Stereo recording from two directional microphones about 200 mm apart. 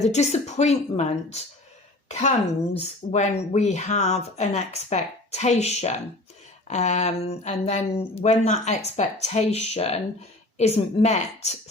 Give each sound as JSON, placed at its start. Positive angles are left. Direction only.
{"t": 0.0, "sound": "speech", "side_deg": 35}